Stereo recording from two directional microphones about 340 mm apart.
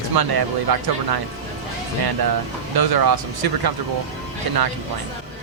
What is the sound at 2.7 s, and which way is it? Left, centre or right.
Speech, right.